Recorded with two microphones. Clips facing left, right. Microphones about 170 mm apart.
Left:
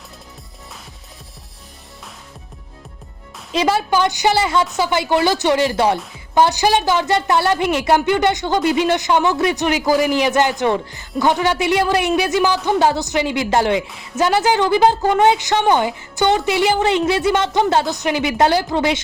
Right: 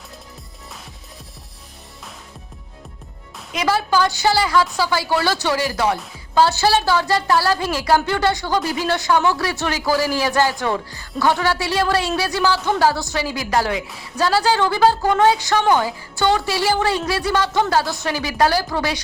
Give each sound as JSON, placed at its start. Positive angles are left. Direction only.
{"t": 3.5, "sound": "a woman's voice", "side_deg": 25}